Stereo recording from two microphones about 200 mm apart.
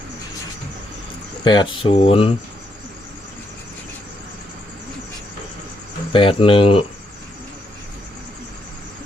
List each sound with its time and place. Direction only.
1.5 s speech: 25° left (ahead or behind)
6.1 s speech: 25° left (ahead or behind)